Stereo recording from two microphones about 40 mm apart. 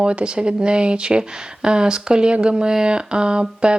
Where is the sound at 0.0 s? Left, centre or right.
Right.